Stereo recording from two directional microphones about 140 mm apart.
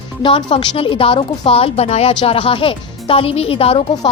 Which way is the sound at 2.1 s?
35° left (ahead or behind).